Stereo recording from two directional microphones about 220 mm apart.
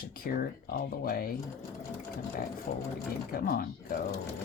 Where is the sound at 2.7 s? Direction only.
40° left (ahead or behind).